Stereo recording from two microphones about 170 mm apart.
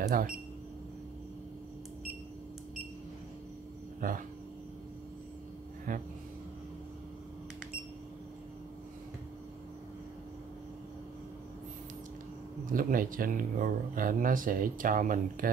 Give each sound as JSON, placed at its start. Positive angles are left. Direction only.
{"t": 0.0, "sound": "speech", "side_deg": -60}
{"t": 4.0, "sound": "speech", "side_deg": -55}
{"t": 5.9, "sound": "speech", "side_deg": -50}
{"t": 12.7, "sound": "speech", "side_deg": -55}